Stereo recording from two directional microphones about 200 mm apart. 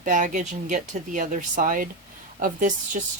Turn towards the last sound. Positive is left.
turn(degrees=-40)  # may be behind; listen again after turning